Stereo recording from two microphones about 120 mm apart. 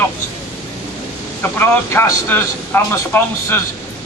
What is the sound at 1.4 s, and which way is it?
A man's voice, 15° left (ahead or behind).